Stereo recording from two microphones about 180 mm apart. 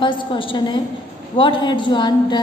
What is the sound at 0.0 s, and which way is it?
A woman's voice, 30° left (ahead or behind).